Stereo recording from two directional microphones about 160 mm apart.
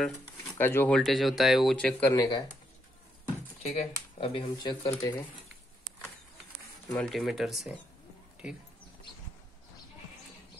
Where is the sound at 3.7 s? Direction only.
40° left (ahead or behind).